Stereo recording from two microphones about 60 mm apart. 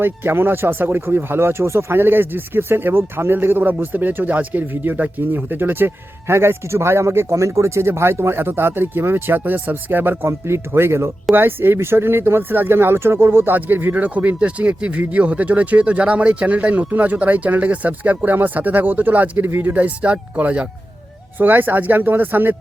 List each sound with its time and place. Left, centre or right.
0.0 s speech: right
10.2 s speech: right
19.7 s speech: right
21.3 s speech: right